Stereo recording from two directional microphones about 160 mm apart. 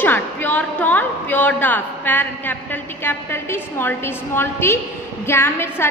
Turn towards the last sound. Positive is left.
turn(degrees=15)  # may be behind; listen again after turning